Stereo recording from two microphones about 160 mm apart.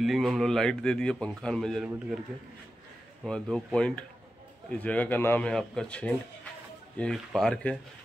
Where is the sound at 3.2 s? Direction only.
5° left (ahead or behind).